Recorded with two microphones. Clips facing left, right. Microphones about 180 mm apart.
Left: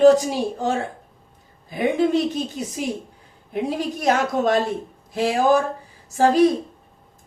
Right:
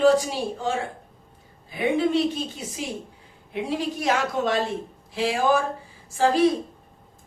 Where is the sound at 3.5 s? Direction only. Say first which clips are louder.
Left 2 dB; 45° left (ahead or behind).